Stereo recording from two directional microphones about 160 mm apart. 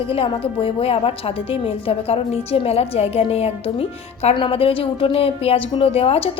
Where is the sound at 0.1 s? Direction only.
35° left (ahead or behind).